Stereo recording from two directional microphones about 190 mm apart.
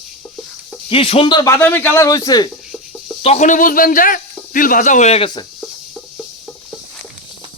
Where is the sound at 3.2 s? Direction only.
40° left (ahead or behind).